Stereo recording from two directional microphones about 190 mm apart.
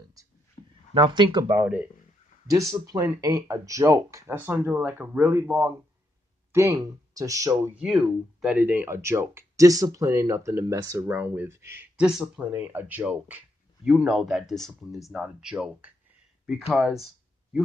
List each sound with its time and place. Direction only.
0.9 s speech: 25° right (ahead or behind)
1.6 s speech: 10° right (ahead or behind)
7.7 s speech: centre (ahead or behind)